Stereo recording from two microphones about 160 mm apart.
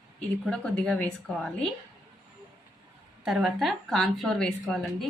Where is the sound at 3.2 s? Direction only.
Centre (ahead or behind).